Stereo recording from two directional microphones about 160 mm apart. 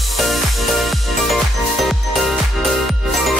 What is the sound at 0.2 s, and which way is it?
Music, centre (ahead or behind).